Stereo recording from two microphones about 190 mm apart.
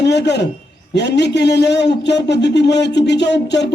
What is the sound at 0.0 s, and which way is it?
A man's voice, 65° left (ahead or behind).